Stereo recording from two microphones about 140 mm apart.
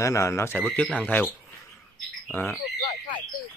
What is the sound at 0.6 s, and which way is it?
Speech, 10° left (ahead or behind).